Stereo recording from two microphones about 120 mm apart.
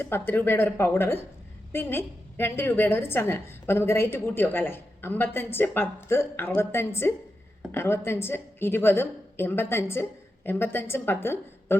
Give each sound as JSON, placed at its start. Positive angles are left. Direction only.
{"t": 0.0, "sound": "a woman's voice", "side_deg": 20}